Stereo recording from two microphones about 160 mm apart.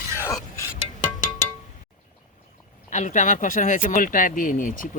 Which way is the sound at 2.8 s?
50° left (ahead or behind).